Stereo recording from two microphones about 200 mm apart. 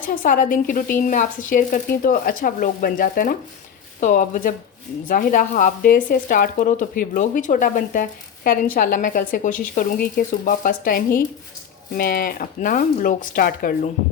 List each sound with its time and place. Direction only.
0.0 s speech: 40° left (ahead or behind)